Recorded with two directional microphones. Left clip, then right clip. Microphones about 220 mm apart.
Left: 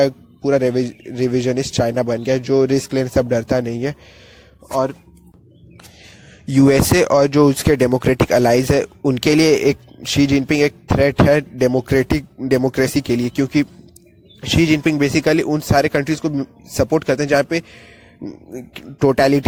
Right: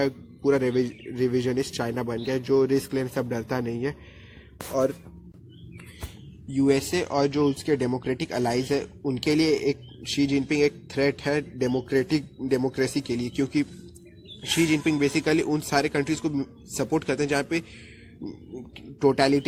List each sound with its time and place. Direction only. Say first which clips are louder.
0.0 s a man's voice: left 8 dB; 45° left (ahead or behind)
6.5 s speech: left 10 dB; 40° left (ahead or behind)